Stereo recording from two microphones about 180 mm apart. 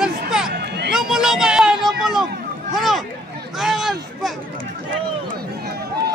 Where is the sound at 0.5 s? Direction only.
65° right (ahead or behind).